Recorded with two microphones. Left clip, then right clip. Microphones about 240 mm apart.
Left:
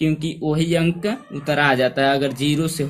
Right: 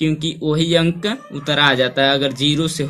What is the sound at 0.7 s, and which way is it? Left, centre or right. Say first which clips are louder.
Speech: right 3 dB; centre.